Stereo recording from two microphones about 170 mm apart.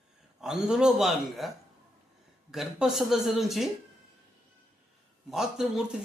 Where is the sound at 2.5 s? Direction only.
Centre (ahead or behind).